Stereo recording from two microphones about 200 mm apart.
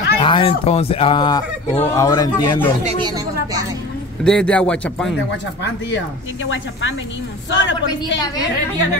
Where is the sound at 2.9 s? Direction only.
20° right (ahead or behind).